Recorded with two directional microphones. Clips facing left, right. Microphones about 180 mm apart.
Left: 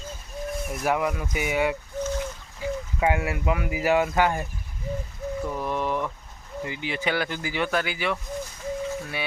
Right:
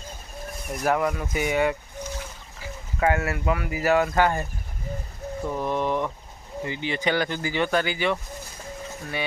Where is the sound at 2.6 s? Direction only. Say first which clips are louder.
Left 10 dB; 20° left (ahead or behind).